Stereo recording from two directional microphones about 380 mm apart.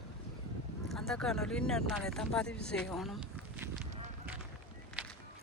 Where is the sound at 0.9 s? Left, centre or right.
Centre.